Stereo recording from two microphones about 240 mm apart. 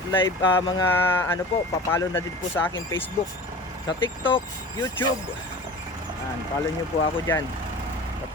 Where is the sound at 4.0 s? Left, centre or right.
Left.